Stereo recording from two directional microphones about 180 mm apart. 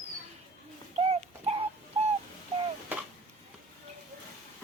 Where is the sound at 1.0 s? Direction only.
35° right (ahead or behind).